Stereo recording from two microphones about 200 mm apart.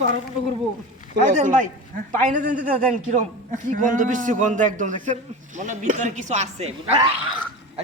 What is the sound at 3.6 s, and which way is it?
A man's voice, 40° right (ahead or behind).